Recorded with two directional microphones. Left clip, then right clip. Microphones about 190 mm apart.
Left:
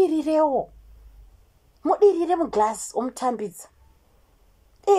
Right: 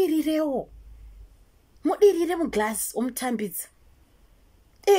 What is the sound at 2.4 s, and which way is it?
Speech, 25° right (ahead or behind).